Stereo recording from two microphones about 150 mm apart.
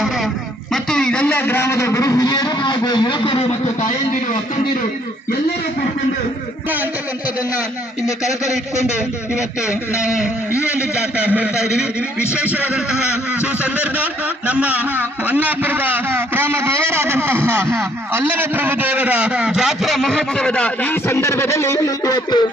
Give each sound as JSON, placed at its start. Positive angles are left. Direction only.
{"t": 0.7, "sound": "a man's voice", "side_deg": 5}
{"t": 8.0, "sound": "speech", "side_deg": 20}
{"t": 10.0, "sound": "a sound", "side_deg": -5}
{"t": 10.9, "sound": "speech", "side_deg": -10}